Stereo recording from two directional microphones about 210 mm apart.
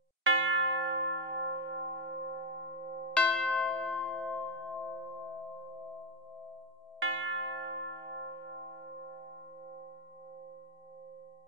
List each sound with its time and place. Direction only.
0.2 s church bell: 70° right (ahead or behind)
3.1 s church bell: 5° left (ahead or behind)
7.0 s church bell: 70° right (ahead or behind)